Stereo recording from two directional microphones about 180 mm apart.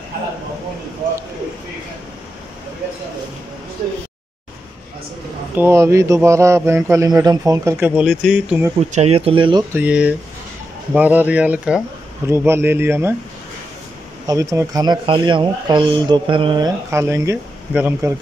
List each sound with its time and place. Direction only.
5.6 s a man's voice: 15° right (ahead or behind)
8.7 s speech: 35° right (ahead or behind)
9.8 s a man's voice: 10° right (ahead or behind)
14.2 s speech: 15° right (ahead or behind)